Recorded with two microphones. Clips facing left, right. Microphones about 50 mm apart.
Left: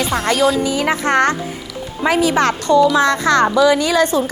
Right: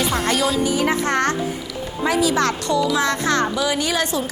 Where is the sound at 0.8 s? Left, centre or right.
Left.